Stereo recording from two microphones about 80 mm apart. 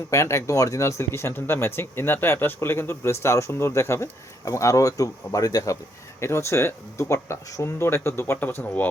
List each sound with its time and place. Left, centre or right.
0.1 s speech: left
6.1 s speech: left